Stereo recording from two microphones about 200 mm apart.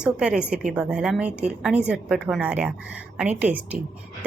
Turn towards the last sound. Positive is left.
turn(degrees=-5)  # may be behind; listen again after turning